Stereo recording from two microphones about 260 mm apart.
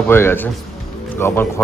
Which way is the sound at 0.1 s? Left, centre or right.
Centre.